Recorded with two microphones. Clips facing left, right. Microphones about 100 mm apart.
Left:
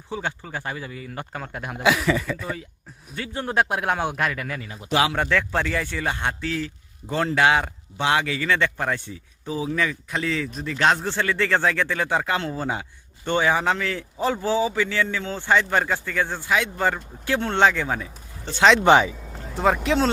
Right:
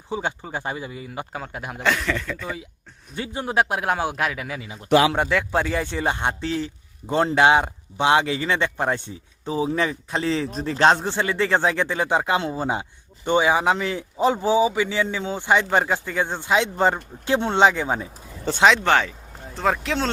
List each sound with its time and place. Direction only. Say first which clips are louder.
0.1 s a man's voice: right 2 dB; 20° right (ahead or behind)
18.8 s speech: left 4 dB; 15° left (ahead or behind)
19.5 s speech: left 3 dB; centre (ahead or behind)